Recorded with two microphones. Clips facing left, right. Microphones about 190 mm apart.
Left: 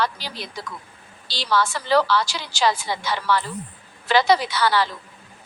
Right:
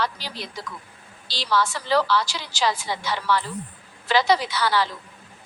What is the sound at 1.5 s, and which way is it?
A woman's voice, 60° left (ahead or behind).